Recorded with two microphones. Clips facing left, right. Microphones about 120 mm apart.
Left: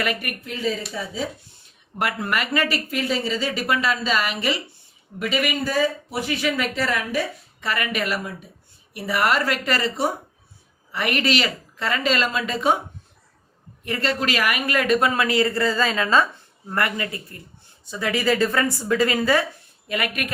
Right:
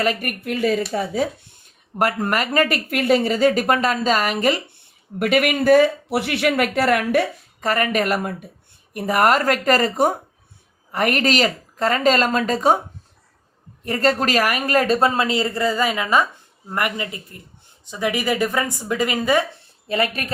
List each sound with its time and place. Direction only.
0.0 s speech: 40° right (ahead or behind)
2.0 s speech: 40° right (ahead or behind)
5.2 s speech: 60° right (ahead or behind)
7.6 s speech: 40° right (ahead or behind)
13.8 s a man's voice: 40° right (ahead or behind); by 19.5 s 20° right (ahead or behind)
19.9 s speech: 30° right (ahead or behind)